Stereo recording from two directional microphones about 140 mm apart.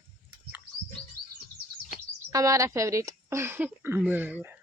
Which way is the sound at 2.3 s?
20° right (ahead or behind).